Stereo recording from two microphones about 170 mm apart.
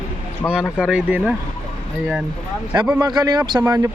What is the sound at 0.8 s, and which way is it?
Speech, 5° right (ahead or behind).